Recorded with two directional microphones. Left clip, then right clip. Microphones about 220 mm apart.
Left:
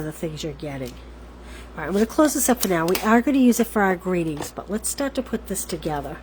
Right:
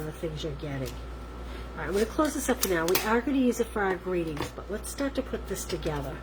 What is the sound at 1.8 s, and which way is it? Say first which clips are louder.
Speech: left 7 dB; 50° left (ahead or behind).